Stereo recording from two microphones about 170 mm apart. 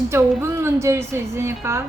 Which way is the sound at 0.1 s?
15° right (ahead or behind).